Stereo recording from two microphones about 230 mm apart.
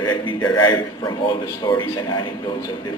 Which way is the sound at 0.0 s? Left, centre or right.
Centre.